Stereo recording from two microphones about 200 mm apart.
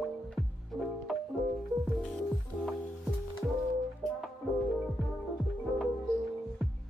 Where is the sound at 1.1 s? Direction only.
Centre (ahead or behind).